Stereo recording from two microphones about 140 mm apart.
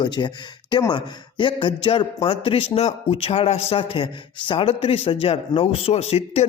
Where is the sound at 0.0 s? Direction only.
30° left (ahead or behind).